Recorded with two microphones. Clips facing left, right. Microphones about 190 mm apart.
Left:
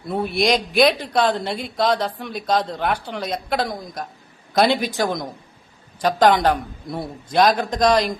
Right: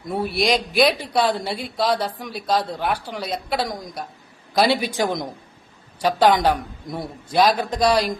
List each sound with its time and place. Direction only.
0.1 s a woman's voice: centre (ahead or behind)
4.9 s a woman's voice: 15° right (ahead or behind)